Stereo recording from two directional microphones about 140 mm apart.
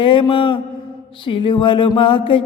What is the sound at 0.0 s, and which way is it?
Mantra, 35° left (ahead or behind).